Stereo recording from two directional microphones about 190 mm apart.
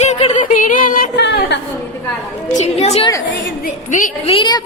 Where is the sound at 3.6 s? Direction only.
45° left (ahead or behind).